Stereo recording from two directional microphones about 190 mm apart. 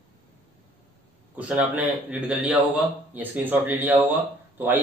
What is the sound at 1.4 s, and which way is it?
Speech, 5° right (ahead or behind).